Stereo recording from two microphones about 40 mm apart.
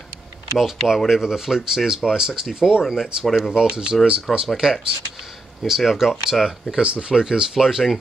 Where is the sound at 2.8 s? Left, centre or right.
Centre.